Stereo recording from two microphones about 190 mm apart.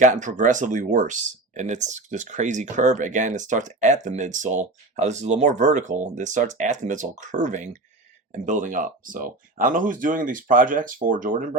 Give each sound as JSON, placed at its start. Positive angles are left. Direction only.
{"t": 0.0, "sound": "speech", "side_deg": -40}